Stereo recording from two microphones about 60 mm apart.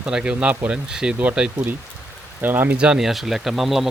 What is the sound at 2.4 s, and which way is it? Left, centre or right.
Speech, right.